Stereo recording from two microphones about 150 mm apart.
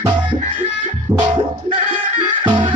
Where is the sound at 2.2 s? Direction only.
35° right (ahead or behind).